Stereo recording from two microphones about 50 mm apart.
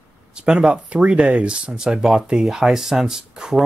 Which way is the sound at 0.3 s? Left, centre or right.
Centre.